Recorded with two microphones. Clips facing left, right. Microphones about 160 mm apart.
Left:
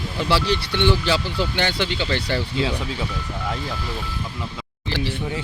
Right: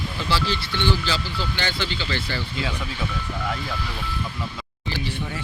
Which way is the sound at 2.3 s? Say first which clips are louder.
Left 6 dB; 30° left (ahead or behind).